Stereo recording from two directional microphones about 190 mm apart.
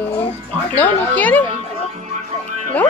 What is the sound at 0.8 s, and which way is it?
Speech, 10° left (ahead or behind).